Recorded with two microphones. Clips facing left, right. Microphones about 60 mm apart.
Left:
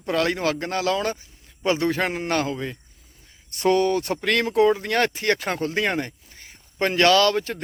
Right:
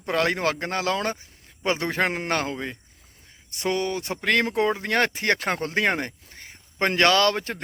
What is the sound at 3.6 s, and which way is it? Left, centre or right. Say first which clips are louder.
Speech: left 6 dB; centre.